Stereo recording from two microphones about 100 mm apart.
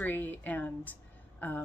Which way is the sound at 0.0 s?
20° left (ahead or behind).